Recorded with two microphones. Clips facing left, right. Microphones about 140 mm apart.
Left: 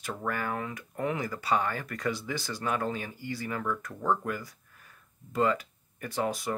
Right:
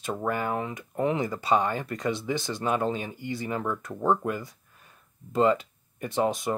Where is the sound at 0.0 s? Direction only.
20° right (ahead or behind).